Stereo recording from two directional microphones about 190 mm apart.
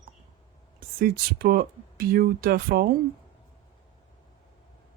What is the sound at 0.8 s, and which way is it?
Speech, 50° right (ahead or behind).